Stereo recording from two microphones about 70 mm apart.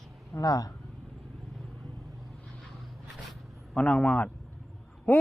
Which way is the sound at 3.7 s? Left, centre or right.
Centre.